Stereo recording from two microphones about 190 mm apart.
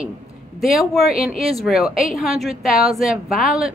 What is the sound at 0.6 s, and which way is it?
Speech, centre (ahead or behind).